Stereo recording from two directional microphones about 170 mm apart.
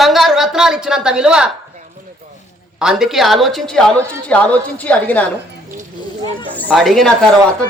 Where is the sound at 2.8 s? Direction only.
5° right (ahead or behind).